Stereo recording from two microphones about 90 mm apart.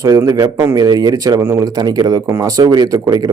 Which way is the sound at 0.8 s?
45° right (ahead or behind).